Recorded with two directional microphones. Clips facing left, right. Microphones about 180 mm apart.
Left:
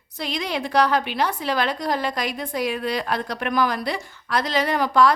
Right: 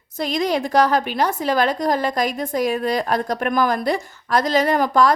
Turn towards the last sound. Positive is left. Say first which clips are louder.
# right 2 dB
turn(degrees=-45)  # may be behind; listen again after turning